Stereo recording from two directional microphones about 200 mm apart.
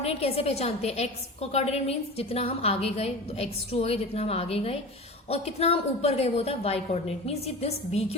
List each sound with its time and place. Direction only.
0.0 s a woman's voice: 30° left (ahead or behind)